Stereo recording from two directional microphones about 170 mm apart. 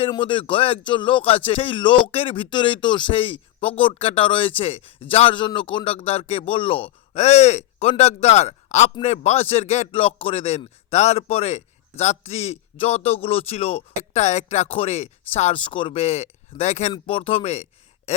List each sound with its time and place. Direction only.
0.0 s speech: 30° left (ahead or behind)